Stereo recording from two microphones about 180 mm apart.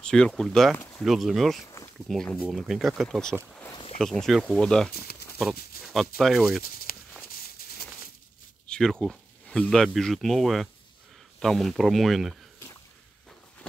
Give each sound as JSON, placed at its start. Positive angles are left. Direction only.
{"t": 0.0, "sound": "speech", "side_deg": 5}
{"t": 5.9, "sound": "speech", "side_deg": 0}
{"t": 6.6, "sound": "a sound", "side_deg": 55}
{"t": 8.6, "sound": "speech", "side_deg": 5}